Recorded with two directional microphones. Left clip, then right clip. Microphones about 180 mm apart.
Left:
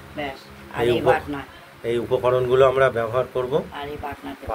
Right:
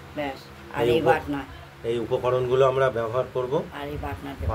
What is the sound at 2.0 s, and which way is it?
Speech, 10° left (ahead or behind).